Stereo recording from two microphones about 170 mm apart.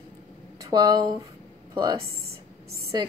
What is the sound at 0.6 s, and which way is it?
A woman's voice, 25° right (ahead or behind).